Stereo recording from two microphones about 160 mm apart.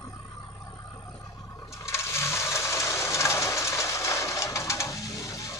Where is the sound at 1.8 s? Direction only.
15° left (ahead or behind).